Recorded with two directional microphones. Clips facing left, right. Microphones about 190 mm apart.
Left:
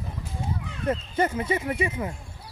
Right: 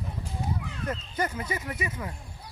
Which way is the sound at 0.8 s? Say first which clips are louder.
Left 7 dB; 25° left (ahead or behind).